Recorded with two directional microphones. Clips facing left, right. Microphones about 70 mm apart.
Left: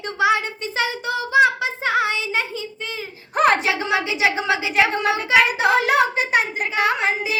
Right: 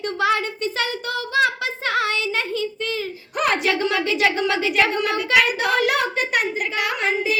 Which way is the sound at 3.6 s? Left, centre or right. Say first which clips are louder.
Right 1 dB; centre.